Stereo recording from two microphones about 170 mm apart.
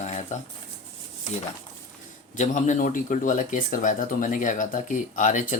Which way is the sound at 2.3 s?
45° left (ahead or behind).